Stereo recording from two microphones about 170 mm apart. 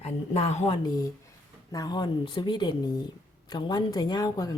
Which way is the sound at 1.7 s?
25° left (ahead or behind).